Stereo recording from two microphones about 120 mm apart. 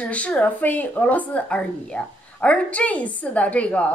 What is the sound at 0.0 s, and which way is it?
A woman's voice, 10° left (ahead or behind).